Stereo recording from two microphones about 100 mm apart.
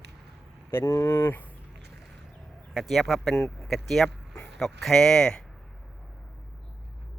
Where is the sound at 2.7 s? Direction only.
Centre (ahead or behind).